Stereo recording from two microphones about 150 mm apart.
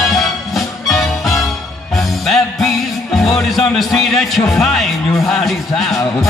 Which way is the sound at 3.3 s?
Centre (ahead or behind).